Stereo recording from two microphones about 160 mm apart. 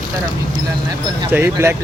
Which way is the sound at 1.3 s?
15° right (ahead or behind).